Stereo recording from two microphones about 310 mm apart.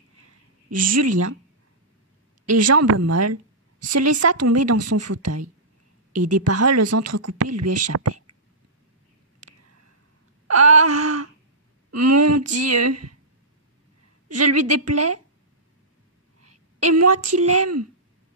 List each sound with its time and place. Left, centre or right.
0.7 s speech: right
2.4 s speech: right
10.5 s speech: right
14.3 s speech: right
16.3 s a woman's voice: right